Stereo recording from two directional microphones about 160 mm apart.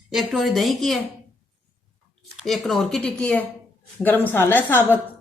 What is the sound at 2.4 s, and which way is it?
A woman's voice, centre (ahead or behind).